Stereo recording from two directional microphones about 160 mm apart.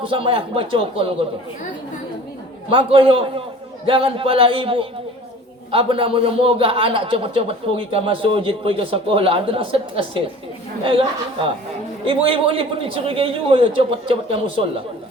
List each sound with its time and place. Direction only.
0.0 s a man's voice: 35° right (ahead or behind)
2.6 s a man's voice: 35° right (ahead or behind)
12.0 s a man's voice: 35° right (ahead or behind)